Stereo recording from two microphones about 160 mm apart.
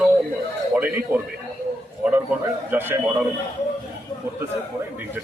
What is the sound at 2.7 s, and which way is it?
Speech, 15° right (ahead or behind).